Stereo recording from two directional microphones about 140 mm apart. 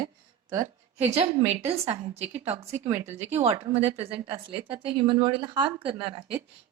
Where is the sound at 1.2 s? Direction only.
50° right (ahead or behind).